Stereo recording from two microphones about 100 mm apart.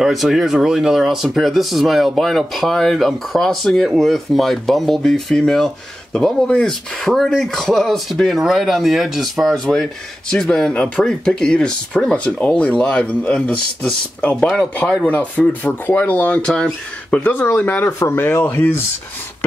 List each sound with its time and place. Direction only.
0.0 s speech: centre (ahead or behind); by 18.7 s 20° left (ahead or behind)